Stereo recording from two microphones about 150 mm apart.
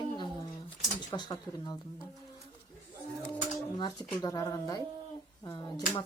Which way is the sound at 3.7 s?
30° left (ahead or behind).